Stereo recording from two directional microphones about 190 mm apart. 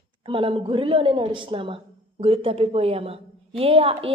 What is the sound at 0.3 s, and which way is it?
A woman's voice, 25° right (ahead or behind).